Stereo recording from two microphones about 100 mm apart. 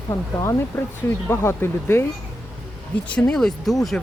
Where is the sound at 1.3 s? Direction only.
25° left (ahead or behind).